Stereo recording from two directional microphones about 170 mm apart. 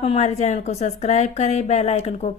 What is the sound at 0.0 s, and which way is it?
A woman's voice, 40° left (ahead or behind).